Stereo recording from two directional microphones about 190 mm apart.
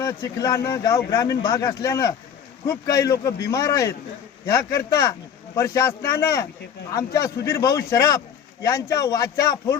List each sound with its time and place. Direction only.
0.0 s a man's voice: 15° left (ahead or behind)